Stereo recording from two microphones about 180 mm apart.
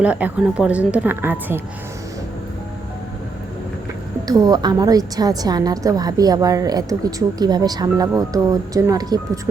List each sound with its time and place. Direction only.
0.0 s a woman's voice: 10° right (ahead or behind)
4.3 s a woman's voice: 20° right (ahead or behind)